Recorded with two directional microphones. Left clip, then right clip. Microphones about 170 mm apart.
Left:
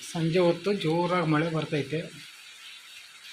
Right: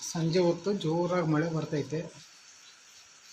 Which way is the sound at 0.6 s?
15° left (ahead or behind).